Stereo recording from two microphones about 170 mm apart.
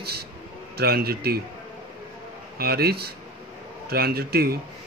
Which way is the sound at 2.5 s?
65° right (ahead or behind).